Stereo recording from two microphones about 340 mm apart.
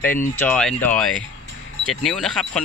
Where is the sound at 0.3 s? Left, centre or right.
Centre.